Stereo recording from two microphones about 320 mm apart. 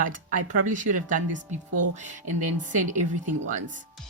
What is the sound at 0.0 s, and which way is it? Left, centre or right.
Speech, right.